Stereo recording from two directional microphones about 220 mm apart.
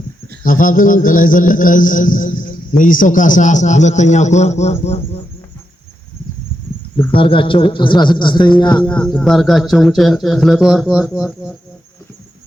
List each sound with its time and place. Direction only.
0.4 s mantra: 40° left (ahead or behind)
7.1 s speech: 25° left (ahead or behind)
8.8 s speech: 5° left (ahead or behind)